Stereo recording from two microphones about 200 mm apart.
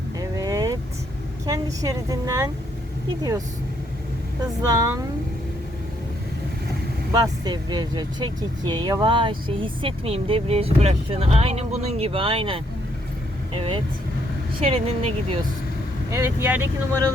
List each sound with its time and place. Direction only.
0.2 s vehicle: 15° right (ahead or behind)
1.5 s a woman's voice: 20° right (ahead or behind)
4.6 s a woman's voice: 20° right (ahead or behind)
7.1 s speech: 20° right (ahead or behind)
16.0 s a woman's voice: 15° right (ahead or behind)